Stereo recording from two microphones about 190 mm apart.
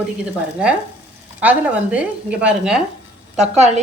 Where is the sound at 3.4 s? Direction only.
35° right (ahead or behind).